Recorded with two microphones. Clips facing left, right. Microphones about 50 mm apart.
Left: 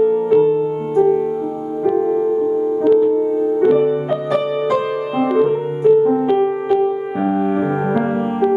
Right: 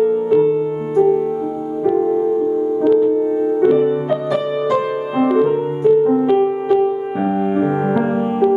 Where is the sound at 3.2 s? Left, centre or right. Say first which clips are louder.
Even; centre.